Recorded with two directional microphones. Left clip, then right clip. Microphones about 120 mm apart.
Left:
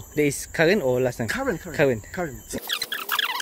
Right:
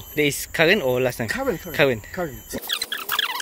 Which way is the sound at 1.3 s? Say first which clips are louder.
Right 2 dB; 15° left (ahead or behind).